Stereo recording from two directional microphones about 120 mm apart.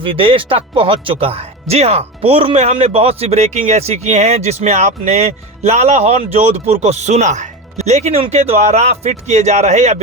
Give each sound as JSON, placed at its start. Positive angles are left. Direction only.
{"t": 0.0, "sound": "speech", "side_deg": -50}